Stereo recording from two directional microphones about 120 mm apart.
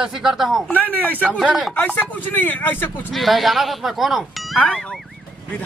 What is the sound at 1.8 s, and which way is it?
Speech, 15° left (ahead or behind).